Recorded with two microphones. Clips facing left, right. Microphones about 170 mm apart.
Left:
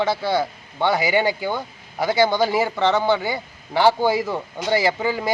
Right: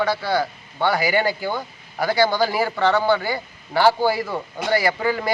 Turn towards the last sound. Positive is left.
turn(degrees=20)  # may be behind; listen again after turning